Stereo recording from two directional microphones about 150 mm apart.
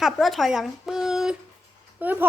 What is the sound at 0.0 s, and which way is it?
Speech, centre (ahead or behind).